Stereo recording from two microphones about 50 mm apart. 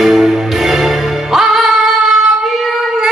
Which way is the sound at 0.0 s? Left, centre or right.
Centre.